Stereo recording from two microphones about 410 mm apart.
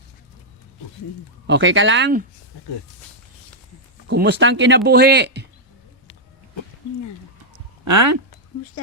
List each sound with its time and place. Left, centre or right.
1.5 s speech: right
4.1 s speech: right
7.9 s speech: right